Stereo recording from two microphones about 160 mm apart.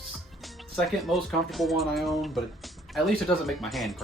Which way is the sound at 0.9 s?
Centre (ahead or behind).